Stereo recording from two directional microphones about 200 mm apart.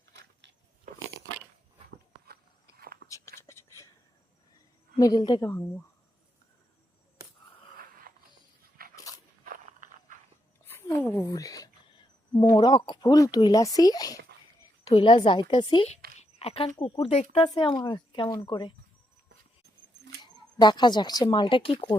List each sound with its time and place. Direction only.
0.1 s biting: 60° right (ahead or behind)
2.7 s biting: 50° right (ahead or behind)
3.1 s whispering: 15° left (ahead or behind)
4.9 s speech: 20° left (ahead or behind)
8.1 s a sound: 45° right (ahead or behind)
8.8 s dog: 50° right (ahead or behind)
9.4 s walk: 40° right (ahead or behind)
10.7 s a sound: 10° left (ahead or behind)
14.8 s speech: 25° left (ahead or behind)
20.2 s speech: 20° left (ahead or behind)